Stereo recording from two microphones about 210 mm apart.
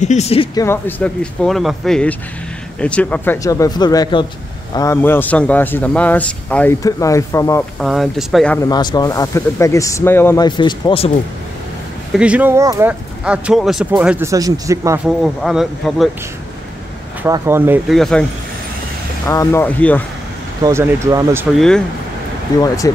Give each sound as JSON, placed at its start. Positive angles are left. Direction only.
{"t": 0.0, "sound": "speech", "side_deg": 35}
{"t": 0.6, "sound": "a man's voice", "side_deg": 10}
{"t": 7.8, "sound": "speech", "side_deg": 0}
{"t": 8.5, "sound": "a man's voice", "side_deg": 20}
{"t": 12.1, "sound": "speech", "side_deg": -5}
{"t": 15.0, "sound": "speech", "side_deg": 0}
{"t": 17.2, "sound": "speech", "side_deg": -10}
{"t": 17.9, "sound": "speech", "side_deg": 0}
{"t": 19.2, "sound": "a man's voice", "side_deg": 15}
{"t": 20.6, "sound": "speech", "side_deg": -15}
{"t": 21.5, "sound": "speech", "side_deg": 5}